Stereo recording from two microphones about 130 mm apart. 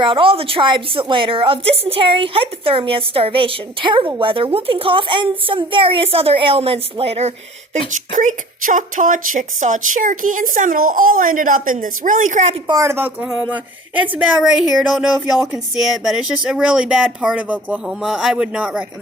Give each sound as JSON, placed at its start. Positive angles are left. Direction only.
{"t": 0.0, "sound": "a woman's voice", "side_deg": -40}
{"t": 8.1, "sound": "speech", "side_deg": -80}
{"t": 12.8, "sound": "a woman's voice", "side_deg": -15}